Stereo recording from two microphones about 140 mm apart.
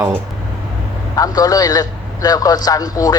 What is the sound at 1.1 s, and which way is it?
A man's voice, 25° left (ahead or behind).